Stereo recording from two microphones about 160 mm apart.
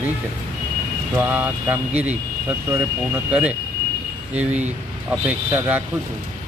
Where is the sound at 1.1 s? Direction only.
10° right (ahead or behind).